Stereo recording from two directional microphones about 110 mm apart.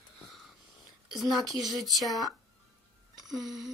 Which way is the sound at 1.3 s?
Centre (ahead or behind).